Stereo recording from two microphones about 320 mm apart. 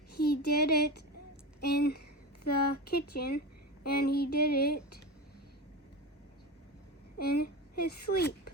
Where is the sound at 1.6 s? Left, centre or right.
Left.